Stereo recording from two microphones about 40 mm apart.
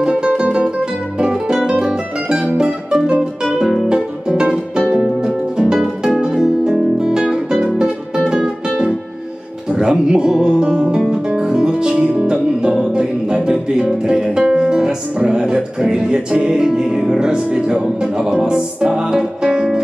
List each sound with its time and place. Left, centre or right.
0.0 s music: right
1.2 s music: centre
3.6 s music: centre
4.3 s music: right